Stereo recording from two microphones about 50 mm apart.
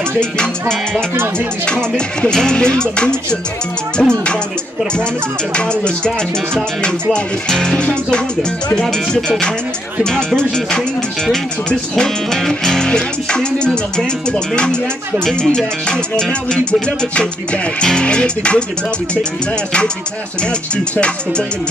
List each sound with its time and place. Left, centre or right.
0.2 s music: centre
5.7 s music: centre
10.0 s music: centre
11.9 s music: centre
17.8 s speech: centre
20.7 s speech: left